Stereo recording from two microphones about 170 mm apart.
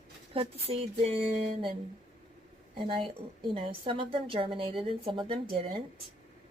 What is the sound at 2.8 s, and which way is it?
A woman's voice, 30° right (ahead or behind).